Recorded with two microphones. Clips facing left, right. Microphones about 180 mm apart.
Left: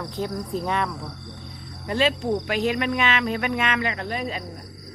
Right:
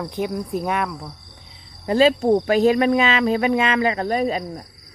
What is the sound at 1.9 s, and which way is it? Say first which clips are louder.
Cricket: right 7 dB; 35° right (ahead or behind).